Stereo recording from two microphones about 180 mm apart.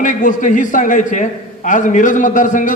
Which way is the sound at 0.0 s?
45° left (ahead or behind).